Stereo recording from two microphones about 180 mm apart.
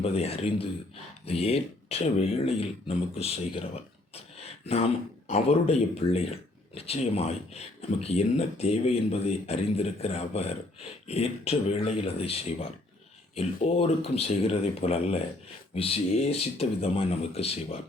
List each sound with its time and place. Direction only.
0.0 s speech: 35° left (ahead or behind)
4.1 s a sound: 35° left (ahead or behind)
5.3 s speech: 35° left (ahead or behind)